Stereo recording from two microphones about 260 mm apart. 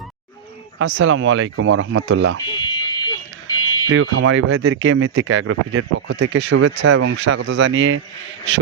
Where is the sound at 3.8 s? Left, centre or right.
Right.